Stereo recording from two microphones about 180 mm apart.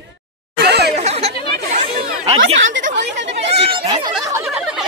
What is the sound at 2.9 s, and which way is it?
Chatter, 80° right.